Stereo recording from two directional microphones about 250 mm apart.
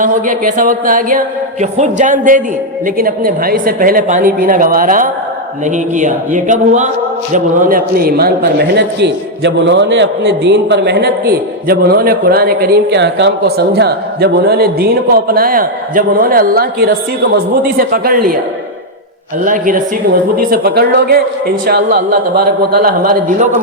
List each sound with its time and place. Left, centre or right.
0.0 s a man's voice: right
19.5 s a man's voice: right